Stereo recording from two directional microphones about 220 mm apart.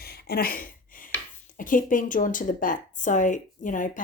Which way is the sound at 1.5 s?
35° left (ahead or behind).